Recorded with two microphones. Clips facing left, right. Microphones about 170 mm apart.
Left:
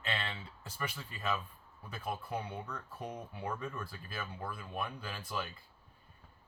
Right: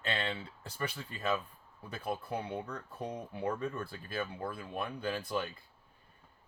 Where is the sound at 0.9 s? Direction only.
30° right (ahead or behind).